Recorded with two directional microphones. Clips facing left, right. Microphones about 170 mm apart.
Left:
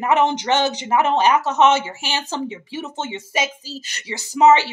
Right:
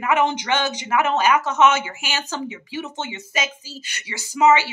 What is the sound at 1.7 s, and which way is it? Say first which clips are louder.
Speech: left 3 dB; 30° left (ahead or behind).